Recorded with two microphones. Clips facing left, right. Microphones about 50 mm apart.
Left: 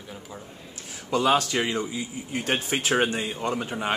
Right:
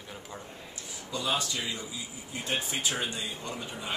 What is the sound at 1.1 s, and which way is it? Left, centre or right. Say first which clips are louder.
A man's voice: left 10 dB; left.